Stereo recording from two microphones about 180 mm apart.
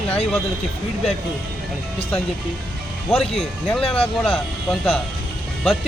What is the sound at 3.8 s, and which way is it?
Speech, 30° left (ahead or behind).